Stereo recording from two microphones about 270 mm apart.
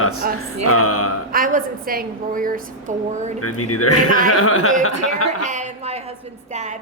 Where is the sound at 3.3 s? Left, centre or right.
Left.